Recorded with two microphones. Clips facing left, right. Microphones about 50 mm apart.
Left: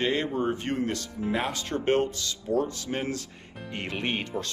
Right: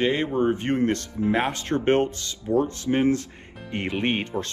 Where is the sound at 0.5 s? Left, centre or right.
Right.